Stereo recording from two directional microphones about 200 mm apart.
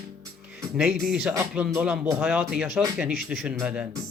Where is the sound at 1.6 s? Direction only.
5° right (ahead or behind).